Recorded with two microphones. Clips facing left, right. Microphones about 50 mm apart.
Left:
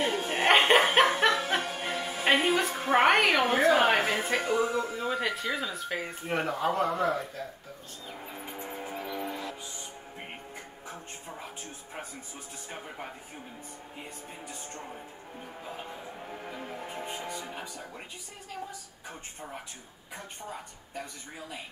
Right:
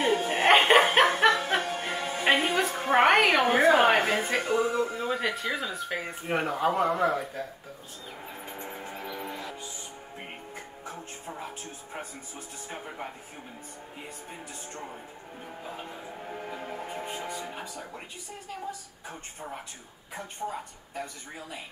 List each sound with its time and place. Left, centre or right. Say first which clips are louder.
0.0 s music: right 3 dB; centre
1.1 s speech: right 2 dB; centre
8.3 s music: even; centre
12.6 s speech: right 3 dB; centre
15.6 s music: right 1 dB; centre
20.4 s a woman's voice: right 8 dB; centre
20.9 s speech: right 3 dB; centre